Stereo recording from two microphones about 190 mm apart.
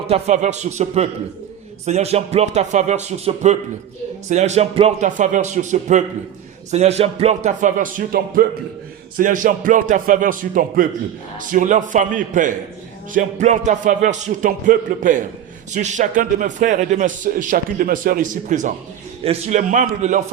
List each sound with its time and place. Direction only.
0.1 s a man's voice: 35° right (ahead or behind)